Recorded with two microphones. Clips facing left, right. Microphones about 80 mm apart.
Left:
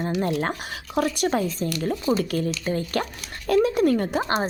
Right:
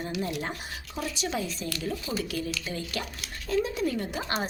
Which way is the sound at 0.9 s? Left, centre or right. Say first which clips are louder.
Left 9 dB; left.